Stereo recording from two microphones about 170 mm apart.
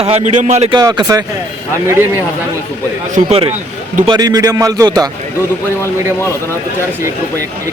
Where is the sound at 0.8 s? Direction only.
20° right (ahead or behind).